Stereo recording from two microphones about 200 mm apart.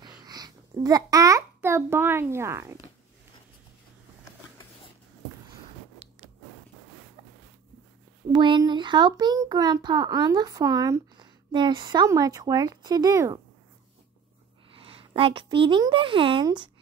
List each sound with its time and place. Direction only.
0.2 s a child's voice: 20° right (ahead or behind)
8.3 s a child's voice: 25° right (ahead or behind)
14.7 s speech: 30° right (ahead or behind)